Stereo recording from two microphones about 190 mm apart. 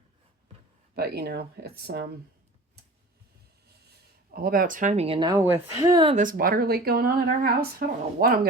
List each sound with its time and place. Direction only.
0.9 s speech: 55° right (ahead or behind)
4.4 s speech: 50° right (ahead or behind); by 5.4 s 25° right (ahead or behind)
5.4 s speech: 15° right (ahead or behind)
6.1 s speech: 45° right (ahead or behind)